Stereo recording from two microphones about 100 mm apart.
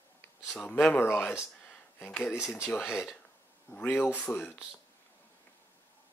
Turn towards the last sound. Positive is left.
turn(degrees=15)  # may be behind; listen again after turning